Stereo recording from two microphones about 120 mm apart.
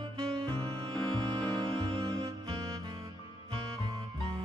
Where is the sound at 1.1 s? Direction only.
35° right (ahead or behind).